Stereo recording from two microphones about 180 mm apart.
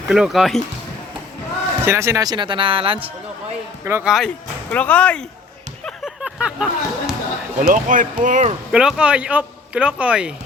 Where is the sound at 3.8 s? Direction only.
15° right (ahead or behind).